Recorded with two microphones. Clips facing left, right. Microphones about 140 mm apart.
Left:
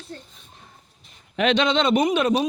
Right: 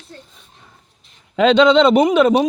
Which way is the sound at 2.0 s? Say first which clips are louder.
Right 7 dB; 90° right.